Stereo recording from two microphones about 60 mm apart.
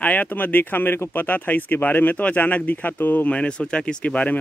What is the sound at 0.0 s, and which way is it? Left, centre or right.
Speech, left.